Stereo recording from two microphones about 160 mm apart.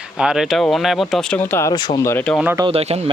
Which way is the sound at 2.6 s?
35° right (ahead or behind).